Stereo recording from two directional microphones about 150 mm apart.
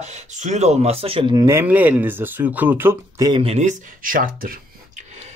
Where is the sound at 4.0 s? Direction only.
70° right (ahead or behind).